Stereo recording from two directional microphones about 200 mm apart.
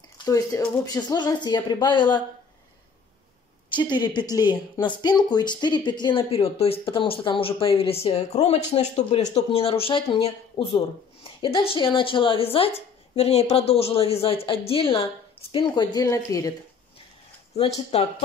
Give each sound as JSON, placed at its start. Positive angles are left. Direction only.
{"t": 0.2, "sound": "speech", "side_deg": 20}
{"t": 3.7, "sound": "speech", "side_deg": 20}
{"t": 17.9, "sound": "speech", "side_deg": 30}